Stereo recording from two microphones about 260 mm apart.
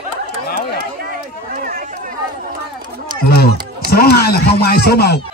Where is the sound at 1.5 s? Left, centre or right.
Right.